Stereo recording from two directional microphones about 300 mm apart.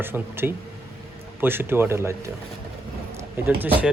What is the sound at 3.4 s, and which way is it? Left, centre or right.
Speech, centre.